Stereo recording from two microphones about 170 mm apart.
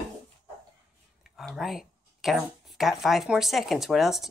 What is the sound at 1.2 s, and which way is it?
Speech, centre (ahead or behind).